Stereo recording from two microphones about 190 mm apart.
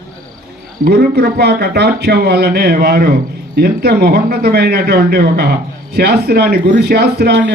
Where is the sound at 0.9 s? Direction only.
55° right (ahead or behind).